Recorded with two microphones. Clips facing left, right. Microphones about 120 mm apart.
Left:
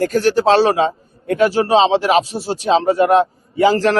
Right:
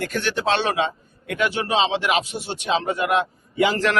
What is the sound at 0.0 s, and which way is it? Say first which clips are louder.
A man's voice: left 9 dB; 35° left (ahead or behind).